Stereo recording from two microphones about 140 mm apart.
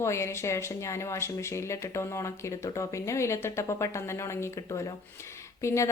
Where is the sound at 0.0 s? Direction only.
20° left (ahead or behind).